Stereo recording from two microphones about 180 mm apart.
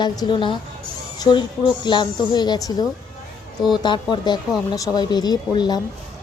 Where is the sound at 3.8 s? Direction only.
25° left (ahead or behind).